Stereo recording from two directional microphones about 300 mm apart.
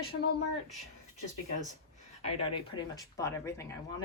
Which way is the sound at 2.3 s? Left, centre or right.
Centre.